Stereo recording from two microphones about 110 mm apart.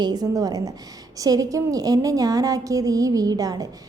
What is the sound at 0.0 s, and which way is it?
A woman's voice, 35° right (ahead or behind).